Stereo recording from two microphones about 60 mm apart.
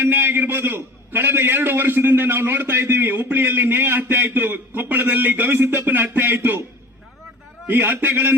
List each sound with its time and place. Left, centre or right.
0.0 s a man's voice: right
7.7 s a man's voice: right